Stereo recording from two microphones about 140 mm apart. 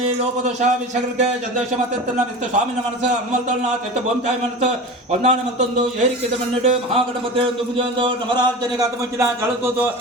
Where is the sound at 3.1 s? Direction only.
55° right (ahead or behind).